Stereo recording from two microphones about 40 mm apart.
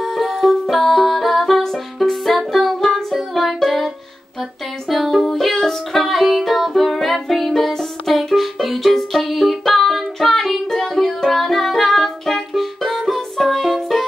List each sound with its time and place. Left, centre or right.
0.0 s music: centre